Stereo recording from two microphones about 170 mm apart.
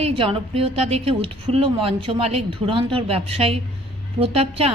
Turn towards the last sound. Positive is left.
turn(degrees=-35)  # may be behind; listen again after turning